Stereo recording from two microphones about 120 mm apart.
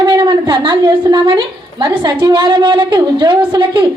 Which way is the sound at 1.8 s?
45° right (ahead or behind).